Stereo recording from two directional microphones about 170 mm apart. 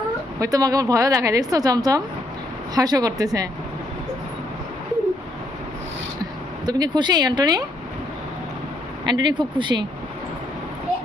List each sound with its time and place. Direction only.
0.3 s a woman's voice: 20° right (ahead or behind)
6.7 s a woman's voice: 25° right (ahead or behind)
9.0 s a woman's voice: 25° right (ahead or behind)